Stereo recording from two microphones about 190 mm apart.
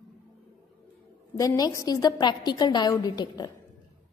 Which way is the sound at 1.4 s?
20° left (ahead or behind).